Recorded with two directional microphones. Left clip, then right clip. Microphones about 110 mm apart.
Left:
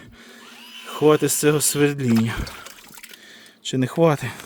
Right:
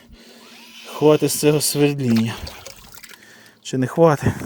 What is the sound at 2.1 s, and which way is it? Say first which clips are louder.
Speech: even; 5° left (ahead or behind).